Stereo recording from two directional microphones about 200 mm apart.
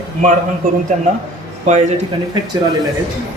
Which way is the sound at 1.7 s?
35° right (ahead or behind).